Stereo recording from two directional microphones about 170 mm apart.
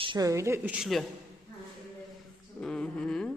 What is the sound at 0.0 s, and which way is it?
Speech, 25° right (ahead or behind).